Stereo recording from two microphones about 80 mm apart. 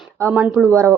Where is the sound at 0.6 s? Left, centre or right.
Right.